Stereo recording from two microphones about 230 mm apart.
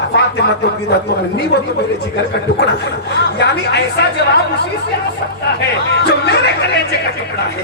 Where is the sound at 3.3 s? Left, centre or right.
Left.